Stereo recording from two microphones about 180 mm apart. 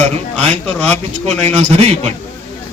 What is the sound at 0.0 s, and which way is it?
Speech, 35° right (ahead or behind).